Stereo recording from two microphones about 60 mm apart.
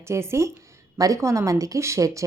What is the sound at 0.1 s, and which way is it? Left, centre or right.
Speech, right.